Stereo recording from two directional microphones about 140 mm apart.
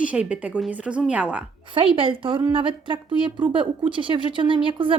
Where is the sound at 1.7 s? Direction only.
40° right (ahead or behind).